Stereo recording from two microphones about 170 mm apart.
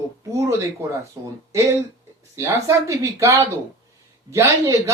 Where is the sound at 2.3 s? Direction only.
15° right (ahead or behind).